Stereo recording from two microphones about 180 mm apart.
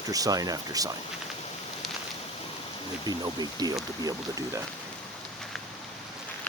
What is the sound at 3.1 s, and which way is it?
Speech, 20° right (ahead or behind).